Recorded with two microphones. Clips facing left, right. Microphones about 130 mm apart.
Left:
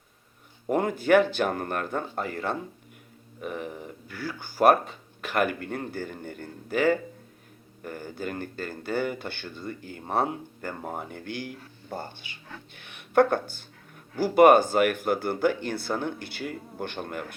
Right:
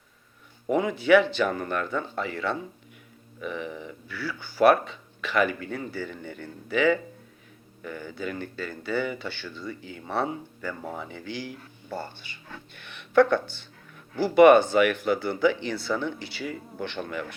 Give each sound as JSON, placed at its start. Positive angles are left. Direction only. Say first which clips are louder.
{"t": 0.7, "sound": "speech", "louder": "right 1 dB", "side_deg": 50}